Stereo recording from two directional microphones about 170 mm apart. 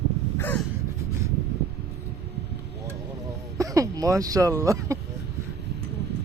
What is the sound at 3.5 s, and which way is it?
Speech, 20° right (ahead or behind).